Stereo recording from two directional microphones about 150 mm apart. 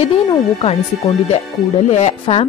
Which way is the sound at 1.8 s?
50° left (ahead or behind).